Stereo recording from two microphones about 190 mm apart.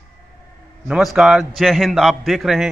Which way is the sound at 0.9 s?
Centre (ahead or behind).